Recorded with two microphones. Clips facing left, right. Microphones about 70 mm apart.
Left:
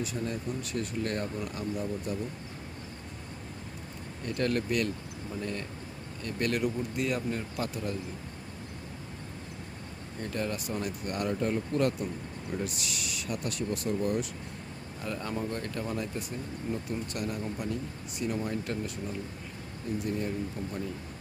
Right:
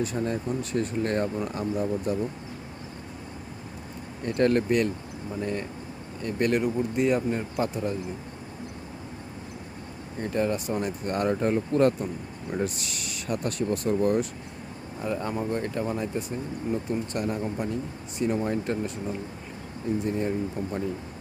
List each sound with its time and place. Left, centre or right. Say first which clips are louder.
0.0 s speech: right 6 dB; right
4.4 s speech: right 7 dB; right
10.2 s speech: right 7 dB; right
15.0 s speech: right 5 dB; right
20.0 s speech: right 4 dB; right